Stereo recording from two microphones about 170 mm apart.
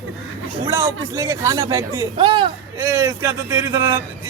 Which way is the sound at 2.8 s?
15° right (ahead or behind).